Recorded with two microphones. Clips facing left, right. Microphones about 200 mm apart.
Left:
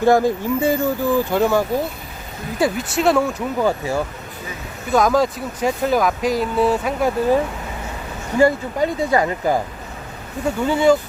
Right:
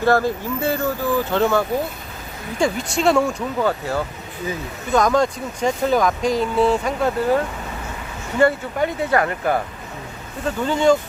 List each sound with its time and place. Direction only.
0.0 s speech: 15° left (ahead or behind); by 3.4 s centre (ahead or behind)
3.6 s speech: 15° left (ahead or behind)
8.4 s speech: 10° left (ahead or behind)